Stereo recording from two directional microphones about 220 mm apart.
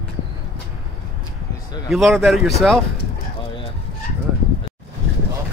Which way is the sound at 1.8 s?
Centre (ahead or behind).